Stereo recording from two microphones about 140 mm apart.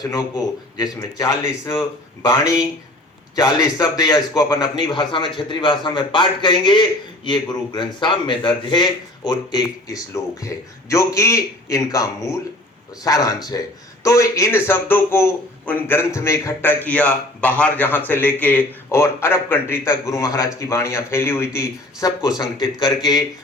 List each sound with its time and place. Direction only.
0.1 s a man's voice: 25° left (ahead or behind)